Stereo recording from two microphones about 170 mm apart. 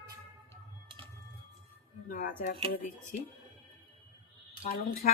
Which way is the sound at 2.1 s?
55° left (ahead or behind).